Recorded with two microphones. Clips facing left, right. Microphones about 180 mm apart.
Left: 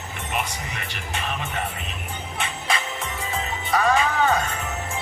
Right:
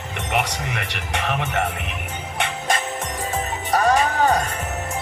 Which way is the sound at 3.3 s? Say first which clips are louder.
Right 2 dB; 40° right (ahead or behind).